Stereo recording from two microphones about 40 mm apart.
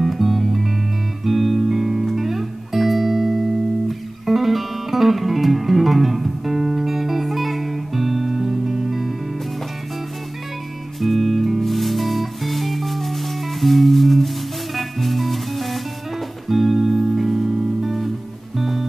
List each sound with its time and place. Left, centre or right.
0.0 s music: centre
11.0 s music: centre